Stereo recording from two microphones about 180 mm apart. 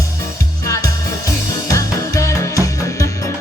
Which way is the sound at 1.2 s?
15° left (ahead or behind).